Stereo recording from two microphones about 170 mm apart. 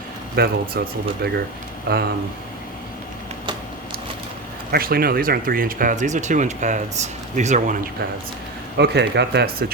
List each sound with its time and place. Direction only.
0.3 s speech: 60° right (ahead or behind)
4.7 s speech: 60° right (ahead or behind); by 7.8 s 45° right (ahead or behind)
8.8 s speech: 85° right